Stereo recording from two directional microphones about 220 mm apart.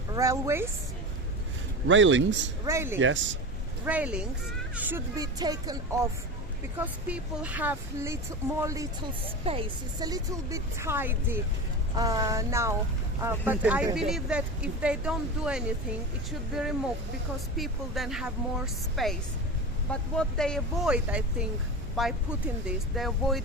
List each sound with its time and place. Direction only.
0.1 s speech: 15° right (ahead or behind)
1.9 s speech: 60° right (ahead or behind)
2.6 s speech: 10° right (ahead or behind)
9.4 s speech: 25° right (ahead or behind); by 16.0 s 5° right (ahead or behind)
17.6 s speech: centre (ahead or behind)